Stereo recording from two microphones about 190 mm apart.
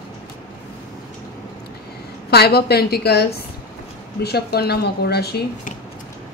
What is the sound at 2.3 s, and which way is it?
Speech, 55° left (ahead or behind).